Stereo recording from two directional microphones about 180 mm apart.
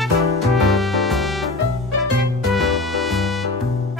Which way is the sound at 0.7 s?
Centre (ahead or behind).